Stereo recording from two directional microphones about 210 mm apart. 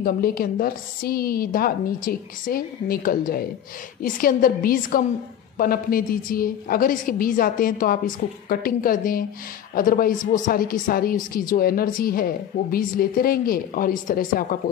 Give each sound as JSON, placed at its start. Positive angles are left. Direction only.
{"t": 0.0, "sound": "a woman's voice", "side_deg": 45}